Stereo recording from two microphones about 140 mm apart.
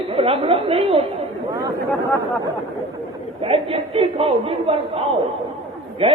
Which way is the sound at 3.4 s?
45° right (ahead or behind).